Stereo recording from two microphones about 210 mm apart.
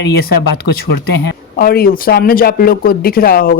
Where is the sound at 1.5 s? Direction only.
45° left (ahead or behind).